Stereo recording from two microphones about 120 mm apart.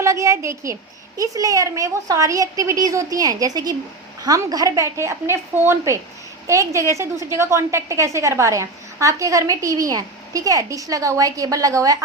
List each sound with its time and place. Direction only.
0.0 s a woman's voice: 25° right (ahead or behind)